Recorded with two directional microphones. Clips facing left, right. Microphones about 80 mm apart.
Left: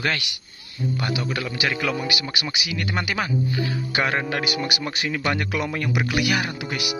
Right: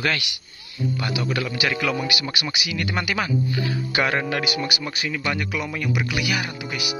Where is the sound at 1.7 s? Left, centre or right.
Centre.